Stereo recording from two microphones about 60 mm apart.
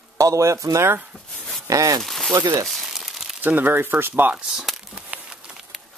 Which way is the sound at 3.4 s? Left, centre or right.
Right.